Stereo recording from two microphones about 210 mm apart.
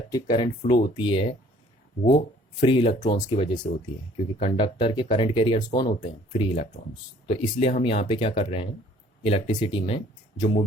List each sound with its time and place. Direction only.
0.1 s speech: 20° left (ahead or behind)